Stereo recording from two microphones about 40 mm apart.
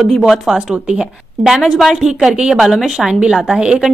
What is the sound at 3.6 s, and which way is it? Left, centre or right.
Speech, centre.